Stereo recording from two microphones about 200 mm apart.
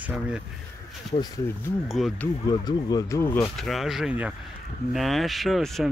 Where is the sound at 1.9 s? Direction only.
Centre (ahead or behind).